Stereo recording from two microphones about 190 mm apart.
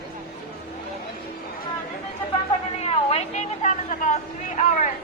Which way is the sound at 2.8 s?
35° left (ahead or behind).